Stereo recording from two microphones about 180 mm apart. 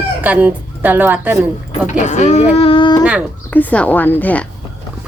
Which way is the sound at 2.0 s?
40° left (ahead or behind).